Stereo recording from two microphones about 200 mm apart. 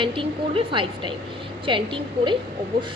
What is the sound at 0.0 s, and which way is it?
Speech, 25° right (ahead or behind).